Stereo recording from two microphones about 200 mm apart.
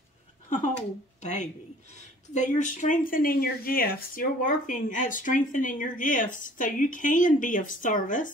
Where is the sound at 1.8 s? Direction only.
35° left (ahead or behind).